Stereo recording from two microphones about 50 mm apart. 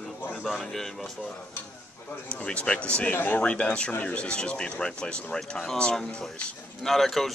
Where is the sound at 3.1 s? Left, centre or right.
Left.